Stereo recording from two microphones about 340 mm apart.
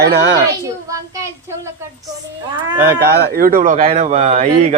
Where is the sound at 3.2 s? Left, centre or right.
Right.